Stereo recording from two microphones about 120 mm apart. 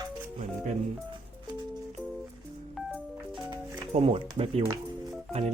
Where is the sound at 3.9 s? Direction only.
50° right (ahead or behind).